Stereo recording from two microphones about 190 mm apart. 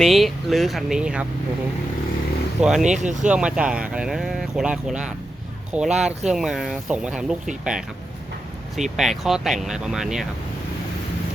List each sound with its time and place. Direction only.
0.0 s speech: centre (ahead or behind)
2.6 s speech: 5° right (ahead or behind)
2.9 s speech: 40° right (ahead or behind)
3.2 s speech: 5° right (ahead or behind)